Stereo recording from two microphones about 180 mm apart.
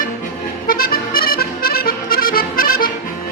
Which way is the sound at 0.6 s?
55° left (ahead or behind).